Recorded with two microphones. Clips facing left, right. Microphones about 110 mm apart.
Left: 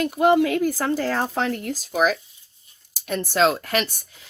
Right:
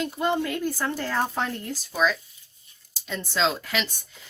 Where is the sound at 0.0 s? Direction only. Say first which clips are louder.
Left 8 dB; 75° left (ahead or behind).